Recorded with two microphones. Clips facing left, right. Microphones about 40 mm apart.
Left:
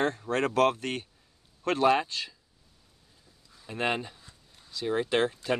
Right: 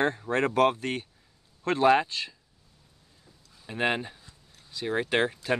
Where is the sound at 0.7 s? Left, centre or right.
Right.